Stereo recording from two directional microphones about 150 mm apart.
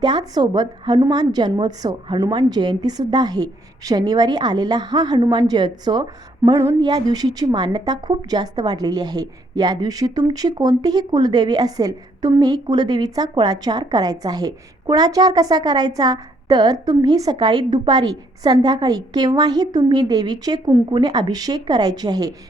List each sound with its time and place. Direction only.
0.0 s a woman's voice: 30° right (ahead or behind)